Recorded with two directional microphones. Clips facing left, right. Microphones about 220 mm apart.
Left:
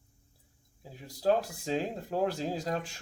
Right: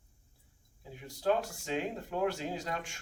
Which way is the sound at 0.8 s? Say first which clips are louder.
Left 3 dB; 35° left (ahead or behind).